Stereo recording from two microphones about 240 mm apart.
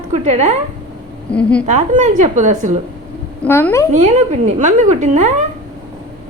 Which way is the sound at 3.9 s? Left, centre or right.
Right.